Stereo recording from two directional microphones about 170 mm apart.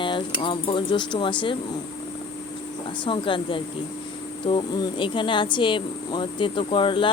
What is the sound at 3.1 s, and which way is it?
Speech, 30° left (ahead or behind).